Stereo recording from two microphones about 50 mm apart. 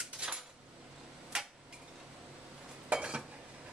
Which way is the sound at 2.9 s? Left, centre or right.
Right.